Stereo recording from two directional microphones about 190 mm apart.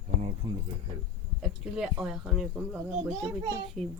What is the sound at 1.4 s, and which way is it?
Speech, centre (ahead or behind).